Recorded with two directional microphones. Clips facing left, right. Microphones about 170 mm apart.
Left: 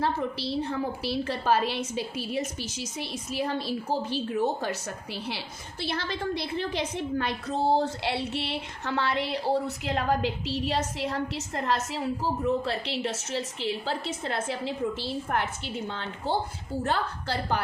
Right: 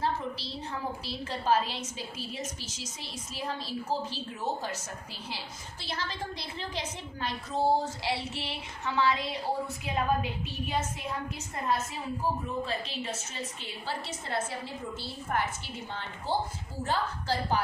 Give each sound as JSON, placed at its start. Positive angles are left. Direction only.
{"t": 0.0, "sound": "a woman's voice", "side_deg": 65}
{"t": 5.8, "sound": "a woman's voice", "side_deg": 70}
{"t": 7.8, "sound": "a sound", "side_deg": 65}
{"t": 14.3, "sound": "a woman's voice", "side_deg": 85}
{"t": 15.3, "sound": "a sound", "side_deg": 65}
{"t": 16.8, "sound": "a woman's voice", "side_deg": 65}